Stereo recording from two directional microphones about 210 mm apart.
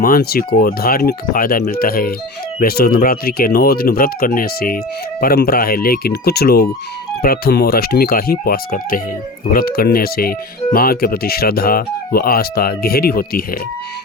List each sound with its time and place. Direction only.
0.0 s speech: 45° left (ahead or behind)